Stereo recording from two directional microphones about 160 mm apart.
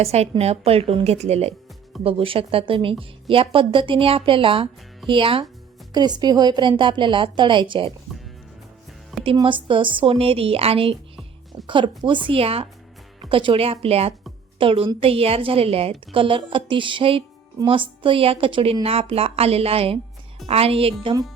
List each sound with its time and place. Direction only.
0.0 s a woman's voice: 40° right (ahead or behind)
9.2 s speech: 30° right (ahead or behind)